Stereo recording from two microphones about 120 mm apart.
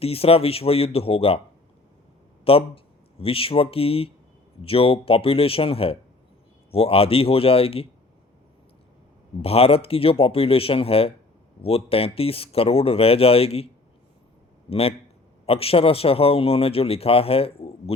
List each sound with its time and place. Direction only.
0.0 s speech: 55° left (ahead or behind)
2.4 s speech: 50° left (ahead or behind)
9.4 s speech: 55° left (ahead or behind)
14.7 s speech: 55° left (ahead or behind)